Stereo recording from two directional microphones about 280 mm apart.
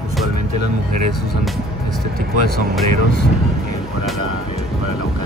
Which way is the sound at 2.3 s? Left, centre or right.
Left.